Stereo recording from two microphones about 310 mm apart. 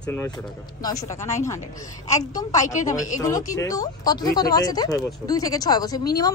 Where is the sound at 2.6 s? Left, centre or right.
Left.